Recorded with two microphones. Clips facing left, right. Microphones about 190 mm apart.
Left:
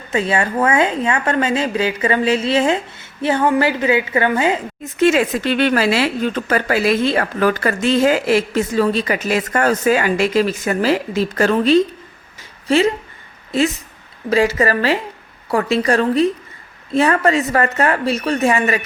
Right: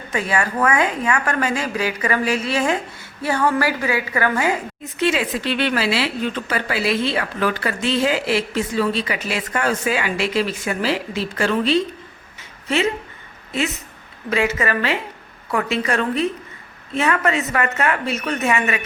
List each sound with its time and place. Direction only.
0.1 s a woman's voice: 25° left (ahead or behind)
4.9 s a woman's voice: 45° left (ahead or behind)
12.4 s a sound: 35° left (ahead or behind)
14.3 s a woman's voice: 35° left (ahead or behind)